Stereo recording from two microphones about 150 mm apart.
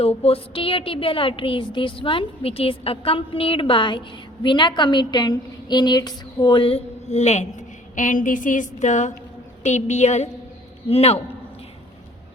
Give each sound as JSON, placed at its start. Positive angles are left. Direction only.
{"t": 0.0, "sound": "a woman's voice", "side_deg": 40}
{"t": 7.9, "sound": "a sound", "side_deg": 60}
{"t": 9.6, "sound": "a woman's voice", "side_deg": 50}